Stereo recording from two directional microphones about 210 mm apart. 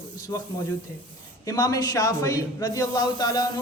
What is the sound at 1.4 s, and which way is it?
Speech, 15° left (ahead or behind).